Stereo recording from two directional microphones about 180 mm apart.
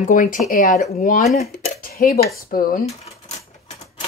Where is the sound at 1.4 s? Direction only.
45° left (ahead or behind).